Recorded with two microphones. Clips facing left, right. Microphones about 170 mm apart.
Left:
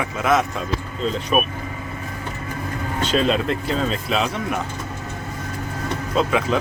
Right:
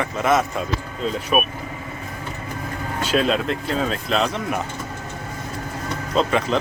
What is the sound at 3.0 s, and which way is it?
Speech, 5° right (ahead or behind).